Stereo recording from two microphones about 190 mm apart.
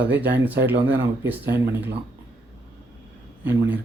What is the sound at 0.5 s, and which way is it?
Speech, 60° right (ahead or behind).